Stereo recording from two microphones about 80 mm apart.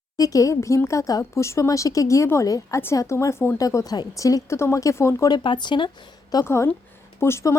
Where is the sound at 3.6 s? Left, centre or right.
Left.